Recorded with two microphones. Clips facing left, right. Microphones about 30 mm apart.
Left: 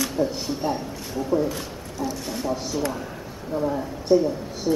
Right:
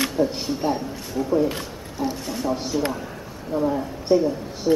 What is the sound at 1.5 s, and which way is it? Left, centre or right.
Speech, right.